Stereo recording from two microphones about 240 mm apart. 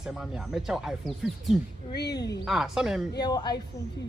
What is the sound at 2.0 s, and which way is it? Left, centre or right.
Speech, left.